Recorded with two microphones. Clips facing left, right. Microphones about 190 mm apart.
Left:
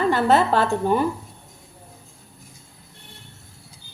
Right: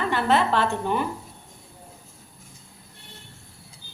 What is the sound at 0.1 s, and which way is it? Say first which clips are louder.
Speech: left 2 dB; 40° left (ahead or behind).